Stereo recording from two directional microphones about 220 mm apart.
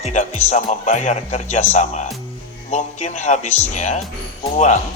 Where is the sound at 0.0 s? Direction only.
30° left (ahead or behind).